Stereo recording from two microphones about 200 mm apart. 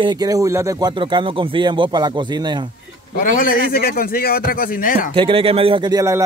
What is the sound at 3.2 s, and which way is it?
A man's voice, 45° left (ahead or behind).